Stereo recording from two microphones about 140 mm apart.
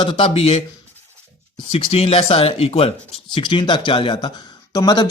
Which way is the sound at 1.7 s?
45° left (ahead or behind).